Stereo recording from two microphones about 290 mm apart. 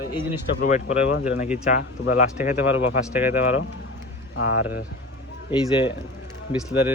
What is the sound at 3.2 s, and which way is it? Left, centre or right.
Speech, centre.